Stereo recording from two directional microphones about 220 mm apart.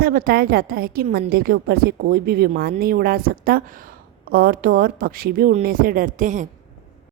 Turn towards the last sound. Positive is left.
turn(degrees=-35)  # may be behind; listen again after turning